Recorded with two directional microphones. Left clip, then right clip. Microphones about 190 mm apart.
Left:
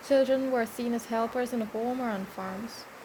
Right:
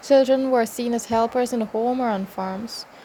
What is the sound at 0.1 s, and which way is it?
Speech, 30° right (ahead or behind).